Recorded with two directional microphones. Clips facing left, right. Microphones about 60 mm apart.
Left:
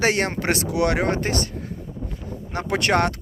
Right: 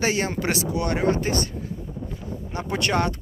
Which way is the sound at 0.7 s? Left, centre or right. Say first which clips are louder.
Left 2 dB; left.